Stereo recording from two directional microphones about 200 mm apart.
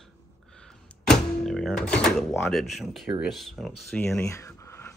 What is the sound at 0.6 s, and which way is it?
Speech, centre (ahead or behind).